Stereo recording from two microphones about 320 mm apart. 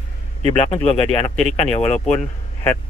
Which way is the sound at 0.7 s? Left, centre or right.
Centre.